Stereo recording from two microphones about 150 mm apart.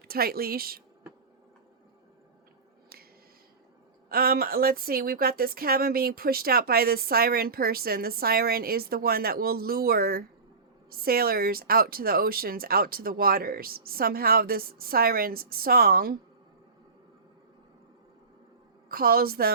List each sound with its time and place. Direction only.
0.1 s speech: 90° right
4.1 s speech: 90° right
18.9 s speech: 80° right